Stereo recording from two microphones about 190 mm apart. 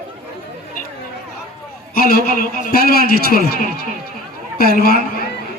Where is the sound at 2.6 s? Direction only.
50° left (ahead or behind).